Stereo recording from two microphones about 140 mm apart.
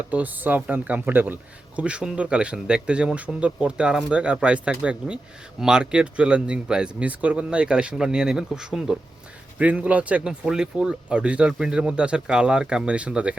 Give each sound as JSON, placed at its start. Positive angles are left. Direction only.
{"t": 0.1, "sound": "speech", "side_deg": -10}